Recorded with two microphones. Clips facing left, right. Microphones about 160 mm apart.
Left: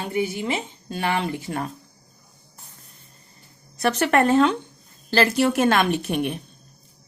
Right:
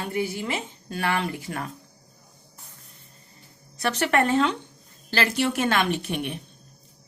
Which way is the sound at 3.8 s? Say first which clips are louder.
Left 3 dB; 40° left (ahead or behind).